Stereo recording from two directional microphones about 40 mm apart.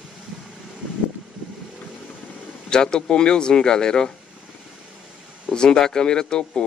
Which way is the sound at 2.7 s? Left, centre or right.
Left.